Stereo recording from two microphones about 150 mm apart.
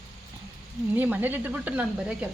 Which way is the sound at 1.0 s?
10° right (ahead or behind).